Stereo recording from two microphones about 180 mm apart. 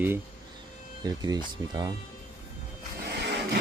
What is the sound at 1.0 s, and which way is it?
Speech, 20° right (ahead or behind).